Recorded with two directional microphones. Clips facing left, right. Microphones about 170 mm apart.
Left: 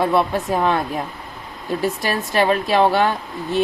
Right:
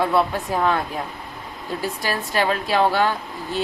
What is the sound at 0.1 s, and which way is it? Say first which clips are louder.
Speech: left 2 dB; 20° left (ahead or behind).